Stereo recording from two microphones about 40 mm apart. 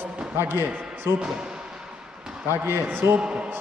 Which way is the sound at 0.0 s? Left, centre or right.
Right.